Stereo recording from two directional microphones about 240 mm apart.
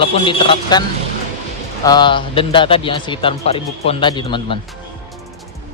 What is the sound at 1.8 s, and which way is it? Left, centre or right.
Speech, centre.